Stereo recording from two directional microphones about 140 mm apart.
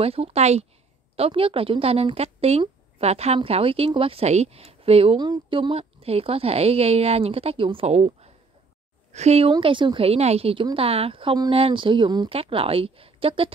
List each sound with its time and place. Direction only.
0.0 s a woman's voice: 45° right (ahead or behind)
5.2 s a woman's voice: 35° right (ahead or behind); by 9.5 s 50° right (ahead or behind)
9.5 s a woman's voice: 35° right (ahead or behind)